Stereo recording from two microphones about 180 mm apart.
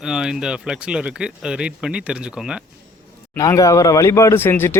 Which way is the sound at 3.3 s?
20° left (ahead or behind).